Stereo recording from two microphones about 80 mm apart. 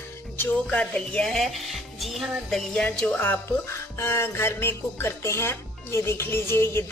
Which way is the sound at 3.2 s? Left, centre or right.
Left.